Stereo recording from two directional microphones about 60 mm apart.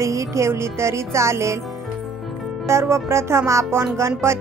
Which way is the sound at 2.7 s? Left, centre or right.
Right.